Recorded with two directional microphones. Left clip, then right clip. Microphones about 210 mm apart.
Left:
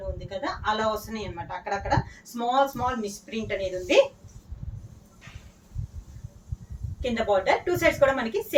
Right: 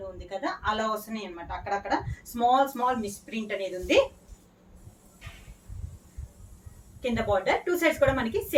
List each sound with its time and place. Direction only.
0.3 s speech: 5° right (ahead or behind)
7.0 s speech: centre (ahead or behind)